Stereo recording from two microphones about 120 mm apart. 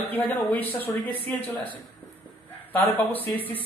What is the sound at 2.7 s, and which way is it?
Speech, 15° left (ahead or behind).